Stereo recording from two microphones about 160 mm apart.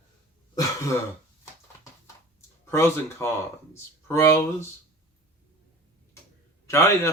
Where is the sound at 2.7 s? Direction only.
15° left (ahead or behind).